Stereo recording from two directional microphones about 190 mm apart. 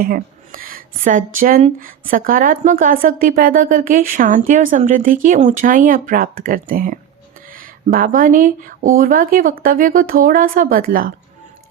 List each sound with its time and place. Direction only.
0.0 s speech: 50° right (ahead or behind)